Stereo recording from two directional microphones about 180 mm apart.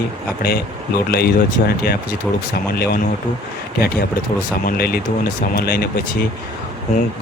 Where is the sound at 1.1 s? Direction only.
60° left (ahead or behind).